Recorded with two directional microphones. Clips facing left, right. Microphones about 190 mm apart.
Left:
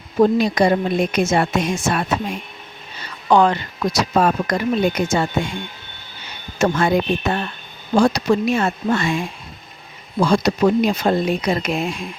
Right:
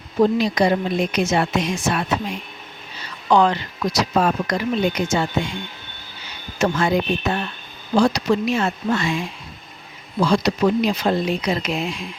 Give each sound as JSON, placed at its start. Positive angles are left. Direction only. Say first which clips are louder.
{"t": 0.2, "sound": "a woman's voice", "louder": "left 2 dB", "side_deg": 50}
{"t": 3.2, "sound": "a woman's voice", "louder": "left 2 dB", "side_deg": 50}
{"t": 6.6, "sound": "a woman's voice", "louder": "left 2 dB", "side_deg": 50}